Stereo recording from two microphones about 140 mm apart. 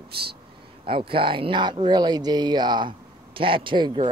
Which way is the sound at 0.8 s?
40° right (ahead or behind).